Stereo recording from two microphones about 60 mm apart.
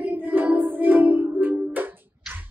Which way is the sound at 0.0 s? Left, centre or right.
Right.